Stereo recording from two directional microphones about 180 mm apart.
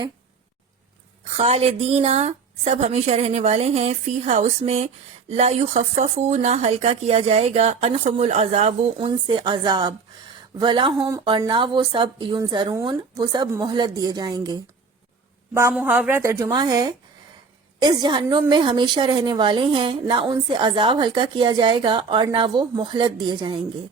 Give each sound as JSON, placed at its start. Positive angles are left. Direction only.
{"t": 1.2, "sound": "a woman's voice", "side_deg": -35}
{"t": 15.7, "sound": "a woman's voice", "side_deg": -10}